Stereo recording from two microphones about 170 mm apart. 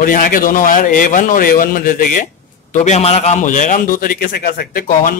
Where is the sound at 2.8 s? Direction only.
40° left (ahead or behind); by 5.1 s 55° left (ahead or behind).